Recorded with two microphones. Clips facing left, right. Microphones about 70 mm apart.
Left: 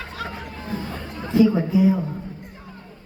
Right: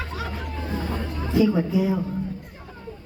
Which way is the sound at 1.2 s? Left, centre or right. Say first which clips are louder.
Left 3 dB; centre.